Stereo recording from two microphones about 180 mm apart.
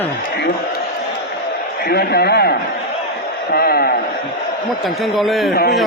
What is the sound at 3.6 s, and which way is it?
Speech, 60° left (ahead or behind).